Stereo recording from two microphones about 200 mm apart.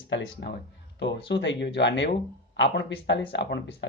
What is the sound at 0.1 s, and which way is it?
Speech, 60° left (ahead or behind).